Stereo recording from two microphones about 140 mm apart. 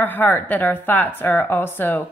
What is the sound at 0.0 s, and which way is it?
A woman's voice, 15° left (ahead or behind).